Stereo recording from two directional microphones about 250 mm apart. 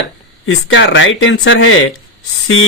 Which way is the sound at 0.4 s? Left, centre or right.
Left.